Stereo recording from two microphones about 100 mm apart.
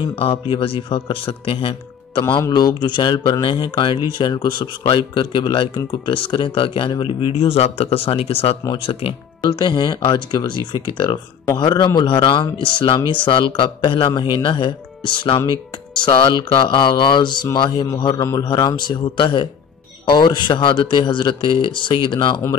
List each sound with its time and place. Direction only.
0.0 s speech: 65° left (ahead or behind)
2.5 s speech: 45° left (ahead or behind); by 8.5 s 70° left (ahead or behind)
9.4 s speech: 50° left (ahead or behind)
18.1 s mantra: 30° left (ahead or behind)
18.6 s speech: 35° left (ahead or behind)
18.9 s speech: 55° left (ahead or behind)